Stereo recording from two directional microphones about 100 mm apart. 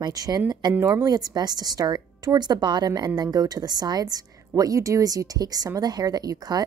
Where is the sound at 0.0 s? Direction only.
40° right (ahead or behind).